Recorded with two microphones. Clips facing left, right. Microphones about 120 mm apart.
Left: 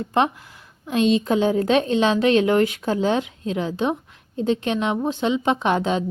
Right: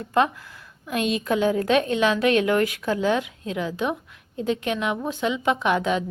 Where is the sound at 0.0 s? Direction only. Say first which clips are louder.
Left 1 dB; 25° left (ahead or behind).